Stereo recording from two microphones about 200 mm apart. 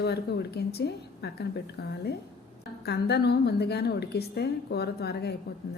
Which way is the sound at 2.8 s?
55° left (ahead or behind).